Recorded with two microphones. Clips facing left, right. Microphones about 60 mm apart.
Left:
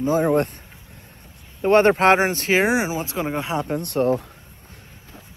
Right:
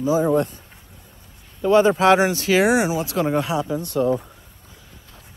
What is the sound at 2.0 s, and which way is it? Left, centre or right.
Speech, left.